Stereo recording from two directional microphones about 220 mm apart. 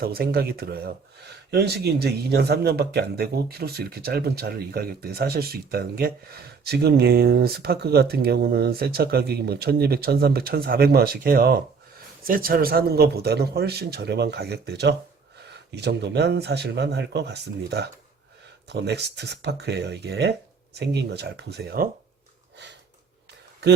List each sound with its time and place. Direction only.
0.0 s speech: 45° right (ahead or behind)